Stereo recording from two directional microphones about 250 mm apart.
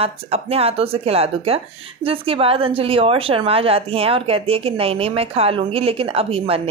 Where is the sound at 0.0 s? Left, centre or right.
Right.